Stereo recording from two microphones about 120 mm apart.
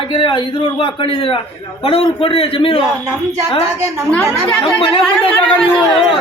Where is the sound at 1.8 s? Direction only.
50° left (ahead or behind).